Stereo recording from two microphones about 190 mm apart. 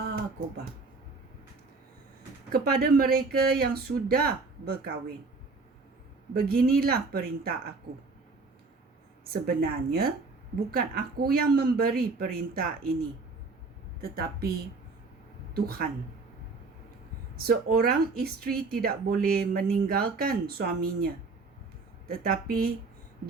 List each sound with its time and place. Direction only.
0.0 s a sound: 50° right (ahead or behind)
2.5 s speech: 50° right (ahead or behind)
6.3 s speech: 50° right (ahead or behind)
9.3 s speech: 55° right (ahead or behind)
14.0 s speech: 50° right (ahead or behind)
15.5 s speech: 50° right (ahead or behind)
17.4 s speech: 50° right (ahead or behind)